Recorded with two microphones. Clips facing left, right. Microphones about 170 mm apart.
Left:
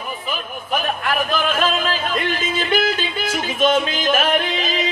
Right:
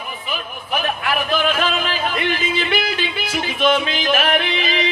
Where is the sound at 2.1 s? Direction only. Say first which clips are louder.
Right 1 dB; 45° left (ahead or behind).